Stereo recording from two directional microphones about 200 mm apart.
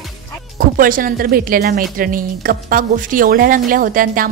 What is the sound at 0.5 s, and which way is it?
Speech, 45° right (ahead or behind).